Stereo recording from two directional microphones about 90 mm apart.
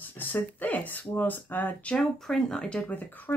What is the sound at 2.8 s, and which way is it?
Speech, 20° left (ahead or behind).